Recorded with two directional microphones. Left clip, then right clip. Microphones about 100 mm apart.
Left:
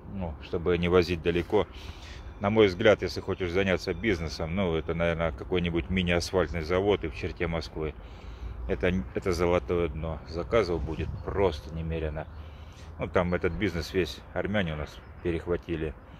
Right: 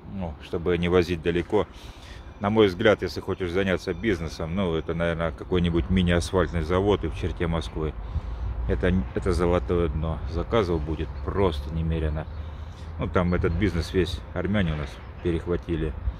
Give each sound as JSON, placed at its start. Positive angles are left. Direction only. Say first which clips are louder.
{"t": 0.7, "sound": "speech", "louder": "right 2 dB", "side_deg": -20}
{"t": 8.6, "sound": "speech", "louder": "right 2 dB", "side_deg": 5}
{"t": 9.5, "sound": "speech", "louder": "right 2 dB", "side_deg": -5}
{"t": 11.4, "sound": "speech", "louder": "right 1 dB", "side_deg": -30}
{"t": 13.0, "sound": "speech", "louder": "right 2 dB", "side_deg": -15}